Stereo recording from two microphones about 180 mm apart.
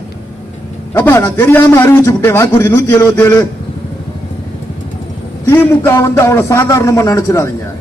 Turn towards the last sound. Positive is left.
turn(degrees=20)  # may be behind; listen again after turning